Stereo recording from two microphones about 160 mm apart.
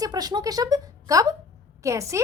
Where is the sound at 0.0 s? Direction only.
25° right (ahead or behind).